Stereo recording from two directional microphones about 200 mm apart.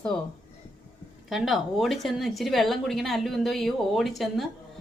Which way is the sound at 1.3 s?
Centre (ahead or behind).